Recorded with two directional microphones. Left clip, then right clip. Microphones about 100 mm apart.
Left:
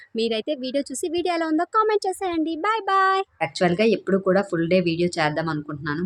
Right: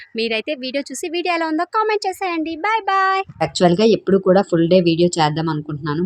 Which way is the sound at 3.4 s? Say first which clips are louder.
Right 6 dB; 40° right (ahead or behind).